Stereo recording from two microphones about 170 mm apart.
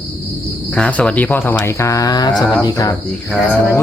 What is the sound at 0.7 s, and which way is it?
Speech, 10° left (ahead or behind).